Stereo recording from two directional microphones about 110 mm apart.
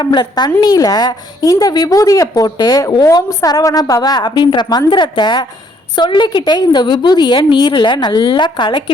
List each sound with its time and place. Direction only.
0.0 s a woman's voice: 40° left (ahead or behind)